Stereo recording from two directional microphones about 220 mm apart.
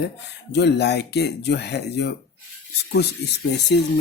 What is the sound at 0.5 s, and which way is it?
Speech, 50° left (ahead or behind).